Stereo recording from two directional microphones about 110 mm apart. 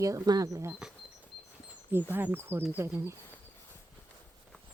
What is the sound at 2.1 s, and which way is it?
Speech, 20° right (ahead or behind).